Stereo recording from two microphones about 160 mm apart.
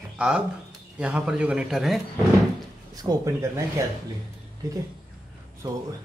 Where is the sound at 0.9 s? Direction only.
5° right (ahead or behind).